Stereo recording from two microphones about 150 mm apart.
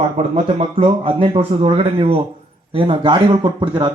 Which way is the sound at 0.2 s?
35° right (ahead or behind).